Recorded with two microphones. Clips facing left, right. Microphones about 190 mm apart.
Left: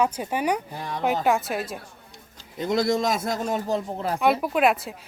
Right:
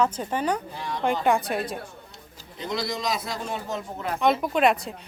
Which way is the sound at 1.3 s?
Centre (ahead or behind).